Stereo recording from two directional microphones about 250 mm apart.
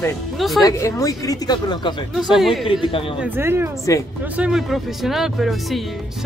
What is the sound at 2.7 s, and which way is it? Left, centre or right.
Speech, left.